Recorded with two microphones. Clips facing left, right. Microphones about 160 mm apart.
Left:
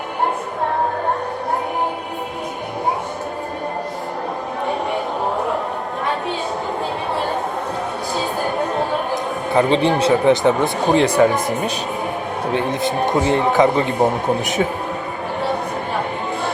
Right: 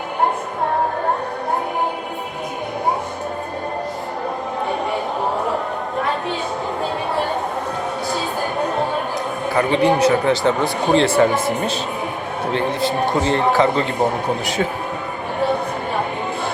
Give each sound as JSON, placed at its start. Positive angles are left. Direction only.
{"t": 9.6, "sound": "speech", "side_deg": 25}